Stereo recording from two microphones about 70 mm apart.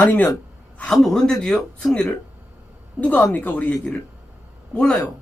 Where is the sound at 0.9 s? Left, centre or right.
Centre.